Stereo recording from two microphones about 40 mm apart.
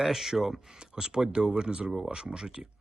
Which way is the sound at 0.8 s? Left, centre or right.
Centre.